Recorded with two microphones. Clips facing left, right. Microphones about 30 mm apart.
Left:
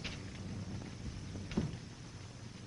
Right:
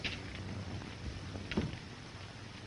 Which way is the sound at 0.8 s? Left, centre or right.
Right.